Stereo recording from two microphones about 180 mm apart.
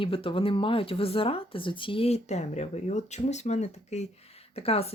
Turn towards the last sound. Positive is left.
turn(degrees=35)  # may be behind; listen again after turning